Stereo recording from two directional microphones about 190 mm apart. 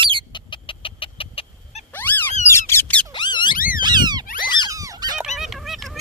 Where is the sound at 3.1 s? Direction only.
25° left (ahead or behind).